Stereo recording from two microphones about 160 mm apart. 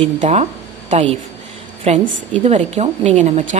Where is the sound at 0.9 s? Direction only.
40° right (ahead or behind).